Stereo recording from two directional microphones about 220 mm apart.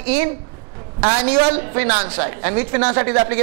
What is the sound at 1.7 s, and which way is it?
A man's voice, 15° right (ahead or behind).